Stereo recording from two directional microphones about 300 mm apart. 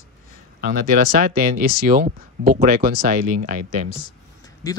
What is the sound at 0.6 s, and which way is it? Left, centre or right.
Speech, right.